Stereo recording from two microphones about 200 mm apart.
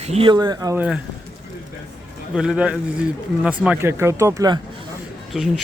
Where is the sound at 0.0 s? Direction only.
30° right (ahead or behind).